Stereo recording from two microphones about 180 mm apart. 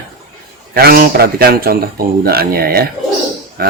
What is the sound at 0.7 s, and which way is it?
Speech, 55° right (ahead or behind).